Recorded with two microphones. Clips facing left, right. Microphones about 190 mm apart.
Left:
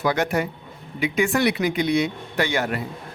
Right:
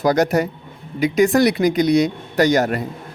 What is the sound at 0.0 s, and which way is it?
Speech, 40° right (ahead or behind).